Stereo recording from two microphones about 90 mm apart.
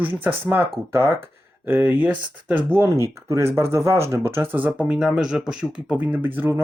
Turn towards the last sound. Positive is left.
turn(degrees=-25)  # may be behind; listen again after turning